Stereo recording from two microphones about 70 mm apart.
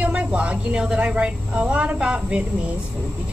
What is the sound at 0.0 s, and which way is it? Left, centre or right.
A woman's voice, centre.